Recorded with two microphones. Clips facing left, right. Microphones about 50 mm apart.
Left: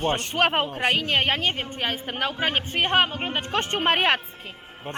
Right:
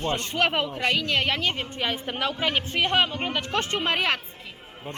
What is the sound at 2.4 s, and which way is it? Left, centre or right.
A man's voice, left.